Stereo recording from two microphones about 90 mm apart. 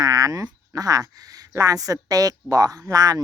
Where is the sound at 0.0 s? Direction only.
40° right (ahead or behind).